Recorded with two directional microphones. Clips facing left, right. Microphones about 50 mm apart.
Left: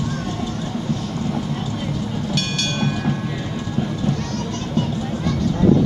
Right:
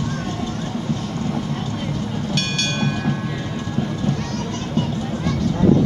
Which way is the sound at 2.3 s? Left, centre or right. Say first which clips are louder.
Right 1 dB; right.